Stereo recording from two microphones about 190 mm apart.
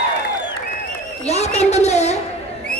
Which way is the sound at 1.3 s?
35° left (ahead or behind).